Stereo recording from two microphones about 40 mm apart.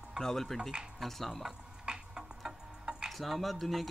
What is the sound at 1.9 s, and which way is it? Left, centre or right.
Tick-tock, right.